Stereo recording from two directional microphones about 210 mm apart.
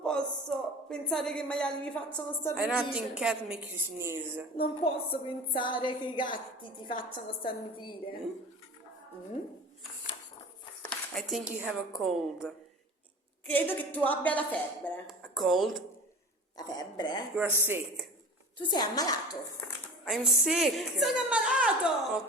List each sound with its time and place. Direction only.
0.0 s a woman's voice: 5° left (ahead or behind)
2.6 s a woman's voice: 5° right (ahead or behind)
4.5 s a woman's voice: 25° left (ahead or behind)
10.8 s a woman's voice: 5° left (ahead or behind)
16.6 s a woman's voice: 20° left (ahead or behind)
17.3 s speech: 10° right (ahead or behind)
18.7 s a woman's voice: 20° left (ahead or behind)
20.1 s a woman's voice: centre (ahead or behind)